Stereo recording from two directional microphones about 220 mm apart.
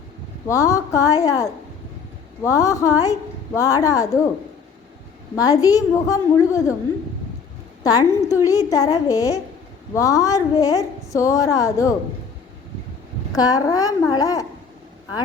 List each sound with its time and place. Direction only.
0.4 s a woman's voice: 15° left (ahead or behind)
5.3 s a woman's voice: 15° left (ahead or behind)
7.9 s a woman's voice: 15° left (ahead or behind)
13.3 s a woman's voice: 15° left (ahead or behind)